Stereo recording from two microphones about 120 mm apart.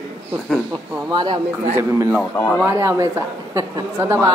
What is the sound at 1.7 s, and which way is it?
A man's voice, 20° right (ahead or behind).